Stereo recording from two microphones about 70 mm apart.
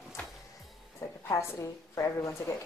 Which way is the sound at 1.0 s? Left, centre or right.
Left.